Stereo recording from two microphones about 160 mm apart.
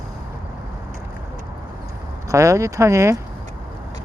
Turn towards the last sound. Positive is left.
turn(degrees=-20)  # may be behind; listen again after turning